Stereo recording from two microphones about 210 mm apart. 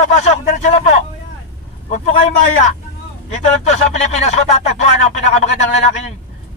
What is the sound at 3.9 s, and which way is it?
Speech, 30° left (ahead or behind).